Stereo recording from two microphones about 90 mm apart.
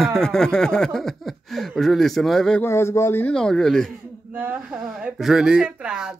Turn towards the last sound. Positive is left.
turn(degrees=-10)  # may be behind; listen again after turning